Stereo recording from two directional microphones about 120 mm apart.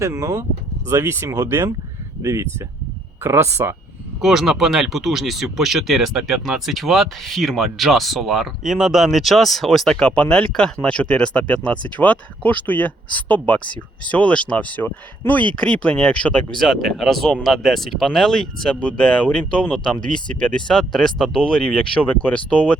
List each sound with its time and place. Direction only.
0.0 s speech: 25° right (ahead or behind)
4.2 s speech: 5° right (ahead or behind)